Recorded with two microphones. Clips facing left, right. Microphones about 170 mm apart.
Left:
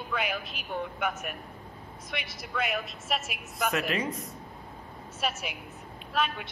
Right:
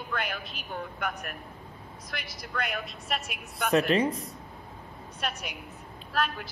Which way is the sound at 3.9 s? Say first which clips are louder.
Right 6 dB; 30° right (ahead or behind).